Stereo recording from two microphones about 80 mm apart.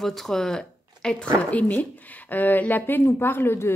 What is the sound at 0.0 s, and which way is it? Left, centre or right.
Speech, centre.